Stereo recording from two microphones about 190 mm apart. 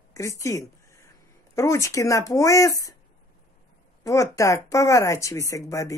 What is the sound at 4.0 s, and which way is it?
Speech, 15° left (ahead or behind).